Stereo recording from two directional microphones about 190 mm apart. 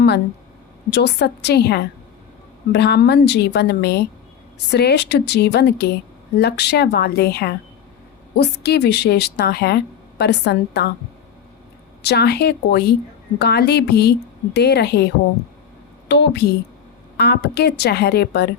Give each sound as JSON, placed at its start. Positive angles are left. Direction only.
{"t": 0.9, "sound": "a woman's voice", "side_deg": 65}
{"t": 12.0, "sound": "a woman's voice", "side_deg": 60}